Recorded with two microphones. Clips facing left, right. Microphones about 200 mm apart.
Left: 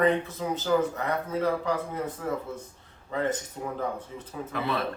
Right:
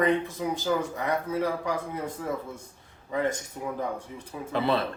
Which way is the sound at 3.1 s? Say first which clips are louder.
Right 1 dB; 10° right (ahead or behind).